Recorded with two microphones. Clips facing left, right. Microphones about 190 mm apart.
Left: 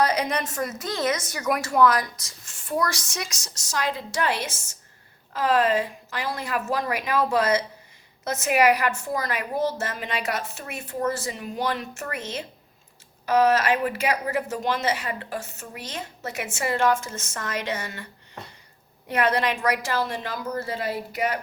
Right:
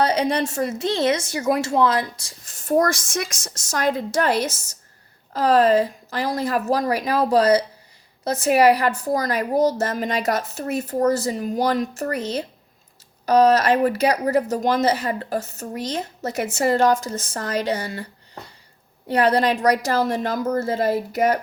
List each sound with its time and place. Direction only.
0.0 s a woman's voice: 30° right (ahead or behind)